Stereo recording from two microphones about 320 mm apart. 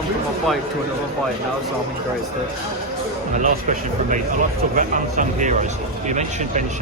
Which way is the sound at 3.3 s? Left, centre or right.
Right.